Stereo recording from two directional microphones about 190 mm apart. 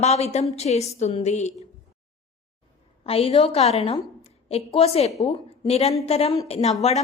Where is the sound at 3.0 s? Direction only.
30° left (ahead or behind).